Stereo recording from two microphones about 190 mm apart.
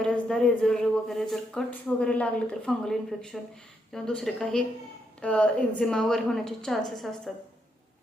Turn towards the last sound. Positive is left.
turn(degrees=0)  # may be behind; listen again after turning